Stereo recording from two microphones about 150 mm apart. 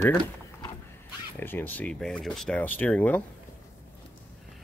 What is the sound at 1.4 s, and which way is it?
Speech, 15° left (ahead or behind).